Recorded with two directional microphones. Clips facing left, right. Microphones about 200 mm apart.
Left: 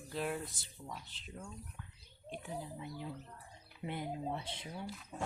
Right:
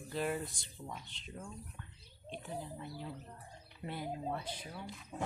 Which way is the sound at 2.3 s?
10° left (ahead or behind).